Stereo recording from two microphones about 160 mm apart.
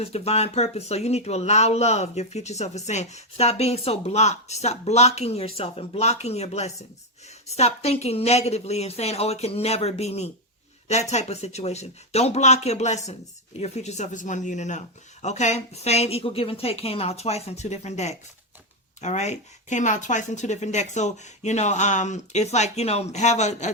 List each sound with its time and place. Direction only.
0.0 s speech: 40° left (ahead or behind)